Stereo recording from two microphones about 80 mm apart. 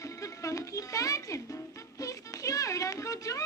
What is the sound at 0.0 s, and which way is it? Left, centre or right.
Music, left.